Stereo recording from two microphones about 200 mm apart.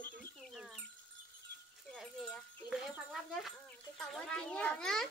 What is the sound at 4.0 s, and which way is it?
A child's voice, 5° left (ahead or behind).